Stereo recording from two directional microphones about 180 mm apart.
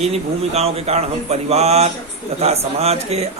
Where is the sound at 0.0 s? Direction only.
35° right (ahead or behind).